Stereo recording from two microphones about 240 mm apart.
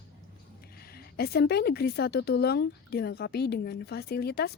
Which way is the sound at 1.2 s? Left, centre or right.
Left.